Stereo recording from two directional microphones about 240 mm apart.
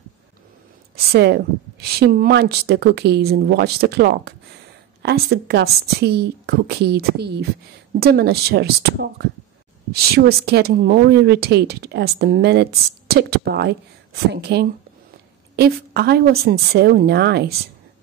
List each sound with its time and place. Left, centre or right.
1.1 s speech: right